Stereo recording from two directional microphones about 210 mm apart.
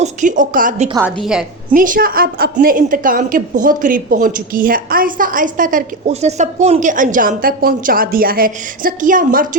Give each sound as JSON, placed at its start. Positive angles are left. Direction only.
{"t": 0.0, "sound": "speech", "side_deg": -35}
{"t": 0.9, "sound": "a woman's voice", "side_deg": -5}
{"t": 1.7, "sound": "a woman's voice", "side_deg": -40}